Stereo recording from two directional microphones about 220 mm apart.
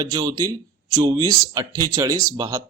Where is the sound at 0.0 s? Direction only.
15° right (ahead or behind).